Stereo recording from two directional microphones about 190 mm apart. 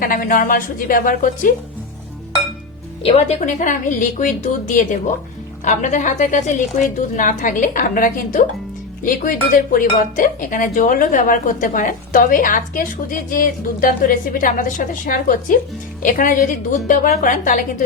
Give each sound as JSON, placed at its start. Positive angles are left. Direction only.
{"t": 0.0, "sound": "speech", "side_deg": 50}
{"t": 3.0, "sound": "a woman's voice", "side_deg": 30}